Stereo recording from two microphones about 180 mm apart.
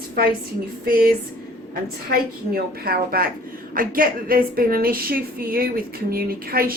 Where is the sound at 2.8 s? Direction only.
55° right (ahead or behind).